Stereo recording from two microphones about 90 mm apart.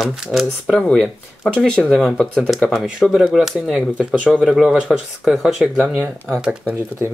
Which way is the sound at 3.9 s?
15° left (ahead or behind).